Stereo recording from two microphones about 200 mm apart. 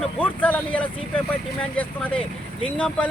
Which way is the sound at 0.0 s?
10° left (ahead or behind).